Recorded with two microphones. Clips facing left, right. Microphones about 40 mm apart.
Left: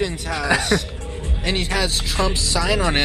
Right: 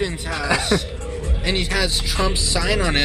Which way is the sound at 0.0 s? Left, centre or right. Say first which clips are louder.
Left 1 dB; centre.